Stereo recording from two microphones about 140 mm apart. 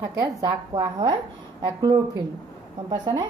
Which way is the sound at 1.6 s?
30° right (ahead or behind).